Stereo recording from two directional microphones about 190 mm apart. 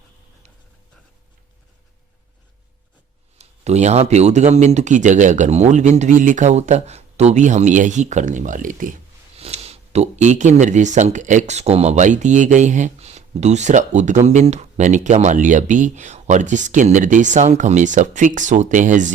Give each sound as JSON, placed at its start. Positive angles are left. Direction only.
{"t": 3.3, "sound": "speech", "side_deg": -35}
{"t": 9.4, "sound": "speech", "side_deg": -30}